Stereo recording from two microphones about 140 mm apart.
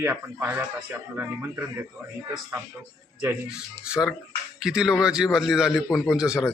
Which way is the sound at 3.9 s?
5° right (ahead or behind).